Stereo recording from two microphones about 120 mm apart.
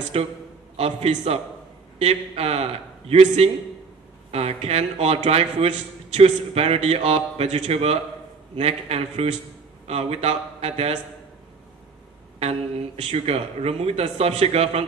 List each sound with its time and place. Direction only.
0.1 s a man's voice: 60° right (ahead or behind)
12.4 s a man's voice: 60° right (ahead or behind)